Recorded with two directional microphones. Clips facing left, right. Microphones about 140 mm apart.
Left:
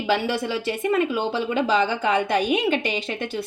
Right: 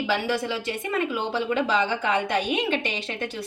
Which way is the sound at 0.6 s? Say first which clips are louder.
Left 5 dB; 35° left (ahead or behind).